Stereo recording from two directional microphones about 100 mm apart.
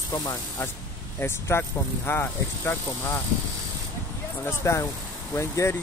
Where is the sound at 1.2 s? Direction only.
25° left (ahead or behind).